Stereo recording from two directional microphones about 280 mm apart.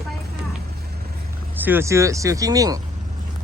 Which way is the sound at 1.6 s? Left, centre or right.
Centre.